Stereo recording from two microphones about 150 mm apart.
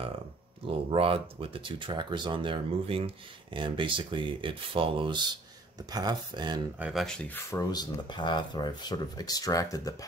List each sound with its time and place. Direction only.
0.8 s speech: 40° right (ahead or behind)
6.8 s speech: centre (ahead or behind)
7.5 s speech: 25° left (ahead or behind)